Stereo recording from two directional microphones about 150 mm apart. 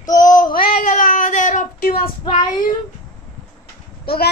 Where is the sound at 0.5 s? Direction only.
70° left (ahead or behind).